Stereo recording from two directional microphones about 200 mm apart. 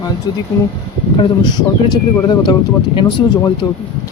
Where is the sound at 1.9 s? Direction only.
20° left (ahead or behind).